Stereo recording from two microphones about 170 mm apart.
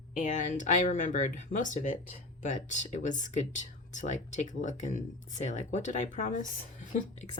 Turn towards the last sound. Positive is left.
turn(degrees=45)  # may be behind; listen again after turning